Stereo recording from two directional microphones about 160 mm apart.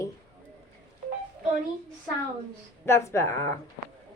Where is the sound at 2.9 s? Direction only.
15° left (ahead or behind).